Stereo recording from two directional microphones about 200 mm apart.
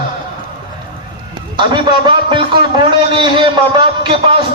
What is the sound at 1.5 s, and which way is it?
A man's voice, 25° right (ahead or behind).